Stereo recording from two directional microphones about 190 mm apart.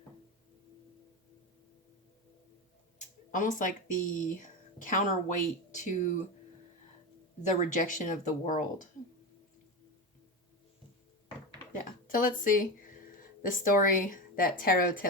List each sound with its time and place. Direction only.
3.3 s speech: 45° left (ahead or behind)
7.6 s a woman's voice: 40° left (ahead or behind)
11.7 s a sound: 45° left (ahead or behind)
13.4 s a woman's voice: 45° left (ahead or behind)